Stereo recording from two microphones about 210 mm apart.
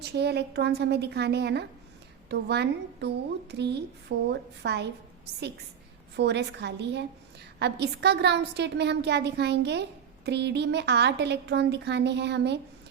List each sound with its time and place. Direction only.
0.0 s a woman's voice: 50° right (ahead or behind)